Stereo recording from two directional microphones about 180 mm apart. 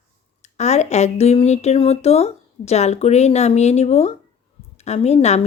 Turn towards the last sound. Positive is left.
turn(degrees=35)  # may be behind; listen again after turning